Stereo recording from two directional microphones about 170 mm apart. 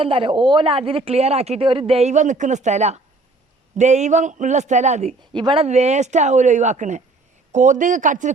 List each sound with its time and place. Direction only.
0.0 s speech: 30° right (ahead or behind)
5.3 s speech: 30° right (ahead or behind)
5.6 s speech: 40° right (ahead or behind)